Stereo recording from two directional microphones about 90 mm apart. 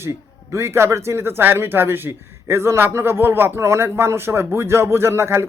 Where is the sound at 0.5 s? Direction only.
30° right (ahead or behind).